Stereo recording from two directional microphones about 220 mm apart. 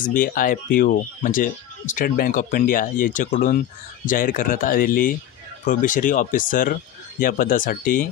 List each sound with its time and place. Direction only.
0.0 s speech: 40° left (ahead or behind)